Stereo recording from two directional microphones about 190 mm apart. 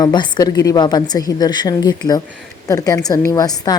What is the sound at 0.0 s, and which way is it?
A woman's voice, 20° left (ahead or behind).